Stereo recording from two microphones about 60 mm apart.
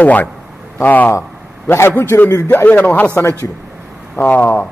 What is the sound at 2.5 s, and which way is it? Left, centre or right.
Speech, left.